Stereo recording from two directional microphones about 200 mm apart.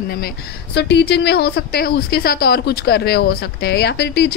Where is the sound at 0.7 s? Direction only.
55° left (ahead or behind).